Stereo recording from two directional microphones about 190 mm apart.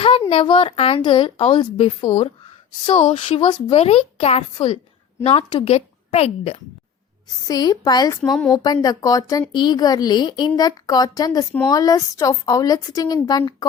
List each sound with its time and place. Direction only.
0.3 s a woman's voice: 30° left (ahead or behind)
7.4 s a woman's voice: 20° left (ahead or behind)
8.2 s speech: 5° left (ahead or behind)
8.4 s a woman's voice: 20° left (ahead or behind)